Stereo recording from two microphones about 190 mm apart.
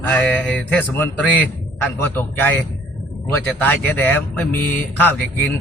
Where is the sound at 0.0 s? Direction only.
10° left (ahead or behind).